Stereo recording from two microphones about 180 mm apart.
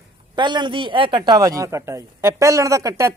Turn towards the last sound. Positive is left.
turn(degrees=-15)  # may be behind; listen again after turning